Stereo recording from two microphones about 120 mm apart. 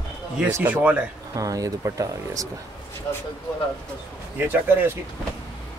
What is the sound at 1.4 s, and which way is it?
Speech, 30° right (ahead or behind).